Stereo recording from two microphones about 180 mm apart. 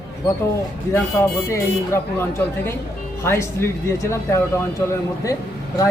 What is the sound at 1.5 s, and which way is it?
Speech, 15° left (ahead or behind).